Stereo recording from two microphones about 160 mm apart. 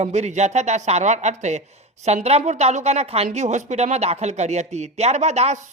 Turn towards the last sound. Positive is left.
turn(degrees=-45)  # may be behind; listen again after turning